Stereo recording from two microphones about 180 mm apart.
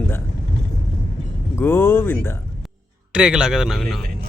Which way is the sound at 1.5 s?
15° left (ahead or behind).